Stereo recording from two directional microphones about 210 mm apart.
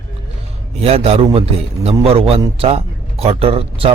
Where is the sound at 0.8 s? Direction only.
30° right (ahead or behind).